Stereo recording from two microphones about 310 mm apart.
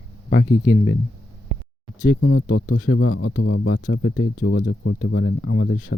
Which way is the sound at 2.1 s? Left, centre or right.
Left.